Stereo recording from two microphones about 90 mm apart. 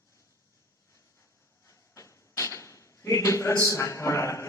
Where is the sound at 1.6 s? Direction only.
35° left (ahead or behind).